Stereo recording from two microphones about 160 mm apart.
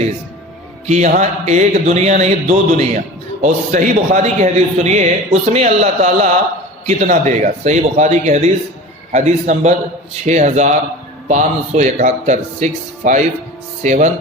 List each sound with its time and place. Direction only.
0.9 s a man's voice: 45° right (ahead or behind)